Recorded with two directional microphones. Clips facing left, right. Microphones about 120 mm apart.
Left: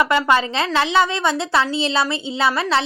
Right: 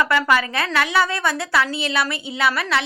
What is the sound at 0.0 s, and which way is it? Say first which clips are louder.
A woman's voice: left 2 dB; 20° left (ahead or behind).